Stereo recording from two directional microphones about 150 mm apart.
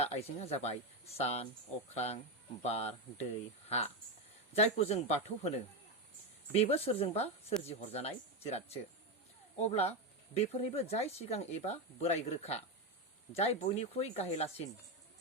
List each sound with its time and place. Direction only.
0.0 s speech: 45° left (ahead or behind)